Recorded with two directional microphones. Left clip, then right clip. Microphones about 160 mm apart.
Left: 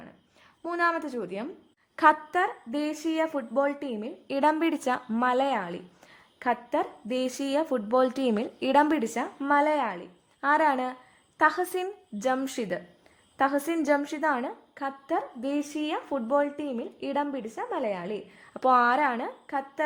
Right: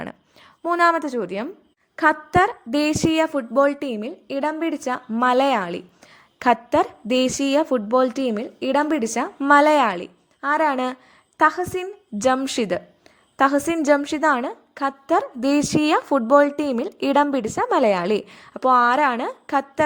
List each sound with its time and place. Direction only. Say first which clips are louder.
0.6 s speech: right 9 dB; 30° right (ahead or behind)
2.0 s a woman's voice: right 2 dB; 15° right (ahead or behind)
2.3 s speech: right 9 dB; 30° right (ahead or behind)
4.3 s a woman's voice: even; 5° right (ahead or behind)
5.2 s speech: right 8 dB; 25° right (ahead or behind)
10.4 s a woman's voice: right 4 dB; 15° right (ahead or behind)
12.5 s a woman's voice: right 9 dB; 30° right (ahead or behind)
18.4 s speech: right 5 dB; 20° right (ahead or behind)